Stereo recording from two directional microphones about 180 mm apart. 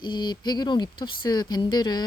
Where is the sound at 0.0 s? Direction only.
25° left (ahead or behind).